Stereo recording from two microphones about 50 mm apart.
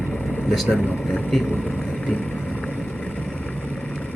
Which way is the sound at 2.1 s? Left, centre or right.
Left.